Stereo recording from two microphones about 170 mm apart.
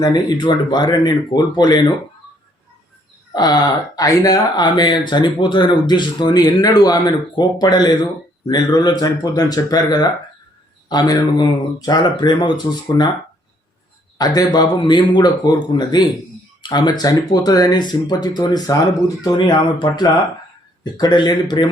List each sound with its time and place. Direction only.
0.0 s speech: 25° left (ahead or behind)
3.3 s speech: 25° left (ahead or behind)
14.2 s speech: 20° left (ahead or behind)